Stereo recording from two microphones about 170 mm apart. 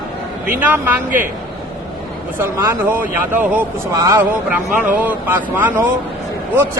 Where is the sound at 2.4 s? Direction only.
15° right (ahead or behind).